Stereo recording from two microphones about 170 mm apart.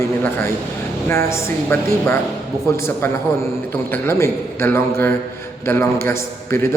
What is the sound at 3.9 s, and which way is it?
A man's voice, 15° left (ahead or behind).